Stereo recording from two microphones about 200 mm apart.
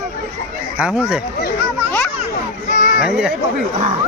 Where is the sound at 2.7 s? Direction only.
40° left (ahead or behind).